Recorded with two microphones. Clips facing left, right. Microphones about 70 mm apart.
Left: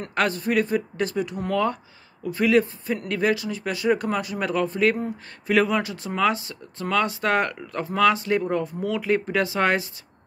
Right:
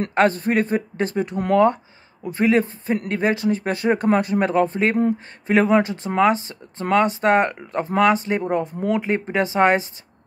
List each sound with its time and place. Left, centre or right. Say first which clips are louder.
0.1 s speech: right 3 dB; right